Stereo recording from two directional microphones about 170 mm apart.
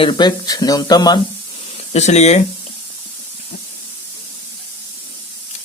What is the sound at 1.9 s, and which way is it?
Speech, 40° left (ahead or behind).